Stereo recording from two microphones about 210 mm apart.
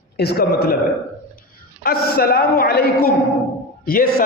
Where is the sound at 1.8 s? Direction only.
45° left (ahead or behind).